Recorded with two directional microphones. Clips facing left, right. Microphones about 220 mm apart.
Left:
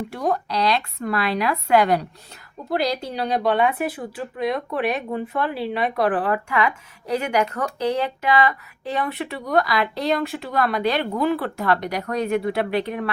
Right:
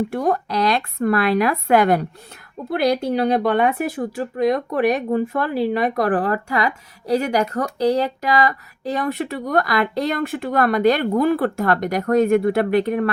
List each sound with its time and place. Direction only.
0.1 s speech: 55° right (ahead or behind)